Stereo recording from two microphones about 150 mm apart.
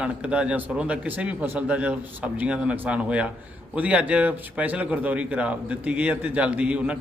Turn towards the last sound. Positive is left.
turn(degrees=-10)  # may be behind; listen again after turning